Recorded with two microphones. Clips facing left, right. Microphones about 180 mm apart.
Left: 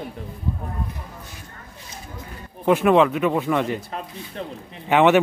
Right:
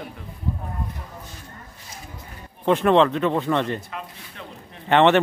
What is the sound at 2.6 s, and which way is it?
Speech, 5° left (ahead or behind).